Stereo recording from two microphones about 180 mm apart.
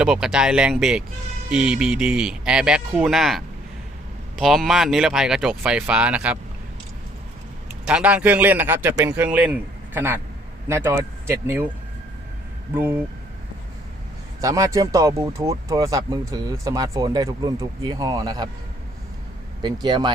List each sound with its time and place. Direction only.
0.0 s speech: 5° right (ahead or behind)
7.9 s a man's voice: 5° right (ahead or behind)
12.7 s a man's voice: 10° right (ahead or behind)
14.4 s speech: 20° right (ahead or behind)
19.6 s speech: 25° right (ahead or behind)